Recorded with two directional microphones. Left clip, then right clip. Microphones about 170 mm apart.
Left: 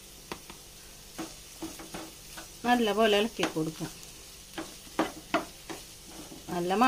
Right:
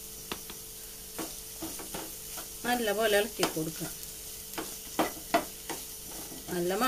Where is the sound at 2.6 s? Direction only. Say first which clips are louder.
Left 4 dB; 50° left (ahead or behind).